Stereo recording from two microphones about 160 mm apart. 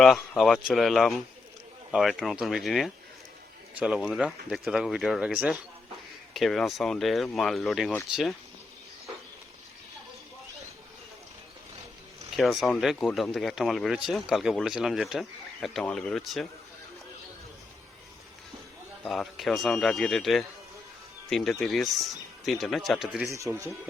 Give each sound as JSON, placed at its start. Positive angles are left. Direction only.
{"t": 0.0, "sound": "speech", "side_deg": 0}
{"t": 12.4, "sound": "speech", "side_deg": 0}
{"t": 19.0, "sound": "speech", "side_deg": 0}
{"t": 23.3, "sound": "speech", "side_deg": -20}